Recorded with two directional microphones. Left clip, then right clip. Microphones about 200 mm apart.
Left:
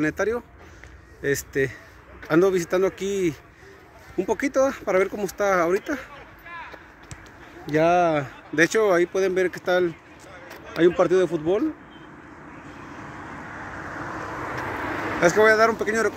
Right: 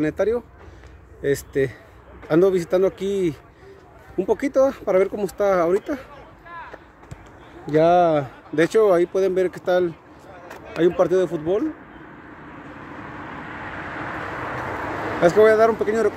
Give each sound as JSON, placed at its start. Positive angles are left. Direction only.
{"t": 0.0, "sound": "speech", "side_deg": -5}
{"t": 7.6, "sound": "speech", "side_deg": -10}
{"t": 11.0, "sound": "speech", "side_deg": 25}
{"t": 12.9, "sound": "vehicle", "side_deg": 45}
{"t": 13.7, "sound": "vehicle", "side_deg": 35}
{"t": 15.2, "sound": "speech", "side_deg": -10}